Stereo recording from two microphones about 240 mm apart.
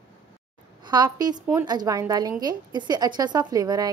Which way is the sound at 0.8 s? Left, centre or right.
Centre.